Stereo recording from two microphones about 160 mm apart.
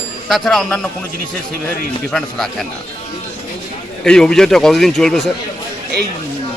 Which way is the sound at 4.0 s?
5° left (ahead or behind).